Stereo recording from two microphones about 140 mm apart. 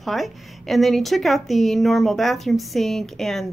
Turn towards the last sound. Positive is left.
turn(degrees=0)  # may be behind; listen again after turning